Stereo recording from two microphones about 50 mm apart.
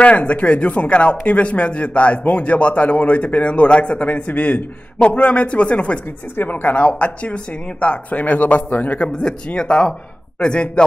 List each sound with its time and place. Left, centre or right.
0.0 s speech: left
6.3 s speech: left
9.0 s speech: centre